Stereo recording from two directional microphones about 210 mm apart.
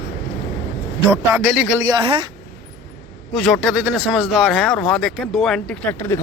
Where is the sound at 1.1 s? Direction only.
10° right (ahead or behind); by 2.3 s 25° right (ahead or behind).